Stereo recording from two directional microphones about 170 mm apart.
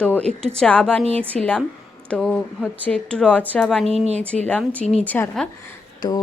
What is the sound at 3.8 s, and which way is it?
Speech, 40° right (ahead or behind).